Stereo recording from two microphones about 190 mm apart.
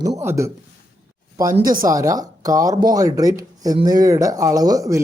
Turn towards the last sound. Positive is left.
turn(degrees=-15)  # may be behind; listen again after turning